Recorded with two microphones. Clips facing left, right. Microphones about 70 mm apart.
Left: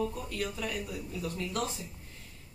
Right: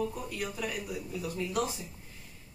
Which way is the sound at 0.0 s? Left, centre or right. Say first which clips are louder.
Left 1 dB; centre.